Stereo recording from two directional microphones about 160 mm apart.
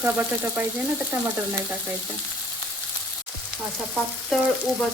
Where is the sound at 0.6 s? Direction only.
10° right (ahead or behind).